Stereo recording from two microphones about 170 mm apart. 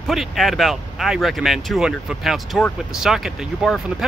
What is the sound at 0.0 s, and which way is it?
Speech, centre (ahead or behind).